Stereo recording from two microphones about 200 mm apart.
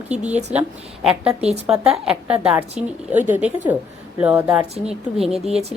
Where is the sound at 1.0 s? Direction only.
5° right (ahead or behind).